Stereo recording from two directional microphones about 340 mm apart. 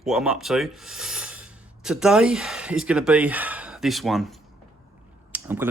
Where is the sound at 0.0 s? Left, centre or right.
Centre.